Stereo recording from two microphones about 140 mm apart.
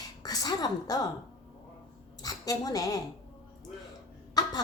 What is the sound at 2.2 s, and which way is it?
Speech, 25° left (ahead or behind).